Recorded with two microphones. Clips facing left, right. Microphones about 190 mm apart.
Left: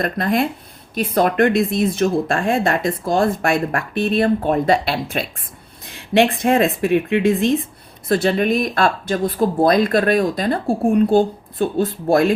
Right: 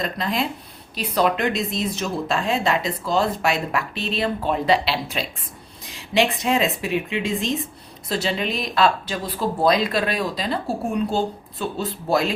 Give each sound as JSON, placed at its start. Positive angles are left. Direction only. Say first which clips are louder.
{"t": 0.0, "sound": "speech", "louder": "left 6 dB", "side_deg": 55}